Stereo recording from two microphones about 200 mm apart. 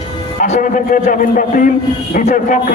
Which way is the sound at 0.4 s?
40° left (ahead or behind).